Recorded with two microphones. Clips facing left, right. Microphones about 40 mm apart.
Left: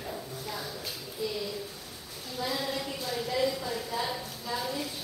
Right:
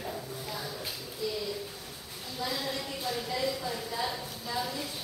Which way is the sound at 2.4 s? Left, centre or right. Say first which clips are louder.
Left 2 dB; centre.